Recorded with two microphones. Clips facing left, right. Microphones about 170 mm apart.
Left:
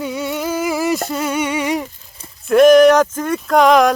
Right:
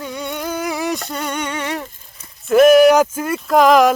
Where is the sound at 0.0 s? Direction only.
5° left (ahead or behind).